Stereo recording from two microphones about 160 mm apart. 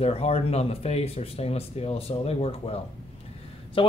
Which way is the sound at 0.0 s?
40° left (ahead or behind).